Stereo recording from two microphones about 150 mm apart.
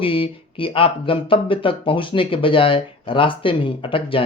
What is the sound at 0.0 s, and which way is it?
Speech, 35° left (ahead or behind).